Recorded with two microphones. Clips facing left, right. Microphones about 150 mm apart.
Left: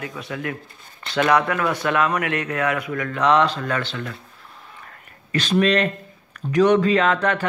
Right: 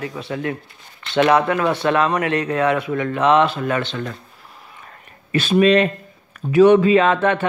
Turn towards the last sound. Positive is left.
turn(degrees=-20)  # may be behind; listen again after turning